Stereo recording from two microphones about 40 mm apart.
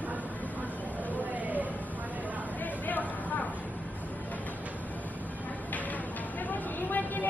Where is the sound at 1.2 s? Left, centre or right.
Right.